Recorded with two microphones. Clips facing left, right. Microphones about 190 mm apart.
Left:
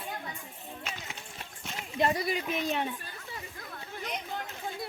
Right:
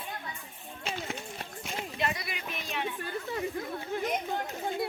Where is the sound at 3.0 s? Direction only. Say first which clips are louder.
Right 11 dB; 55° right (ahead or behind).